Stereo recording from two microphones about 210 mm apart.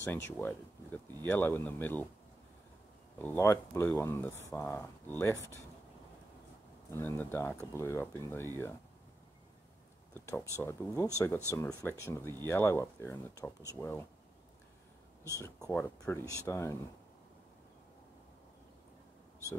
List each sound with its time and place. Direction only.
0.4 s speech: 10° left (ahead or behind)
3.2 s speech: 10° left (ahead or behind)
6.9 s speech: 10° left (ahead or behind)
10.1 s speech: 15° left (ahead or behind)
15.3 s speech: 15° left (ahead or behind)